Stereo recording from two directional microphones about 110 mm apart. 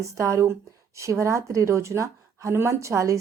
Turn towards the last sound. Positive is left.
turn(degrees=-30)  # may be behind; listen again after turning